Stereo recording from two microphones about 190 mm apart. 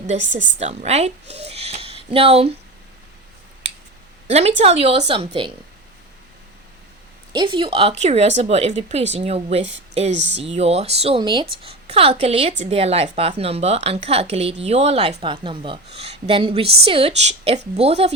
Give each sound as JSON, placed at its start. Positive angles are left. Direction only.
{"t": 0.1, "sound": "a woman's voice", "side_deg": -40}
{"t": 4.3, "sound": "a woman's voice", "side_deg": -35}
{"t": 7.3, "sound": "a woman's voice", "side_deg": -25}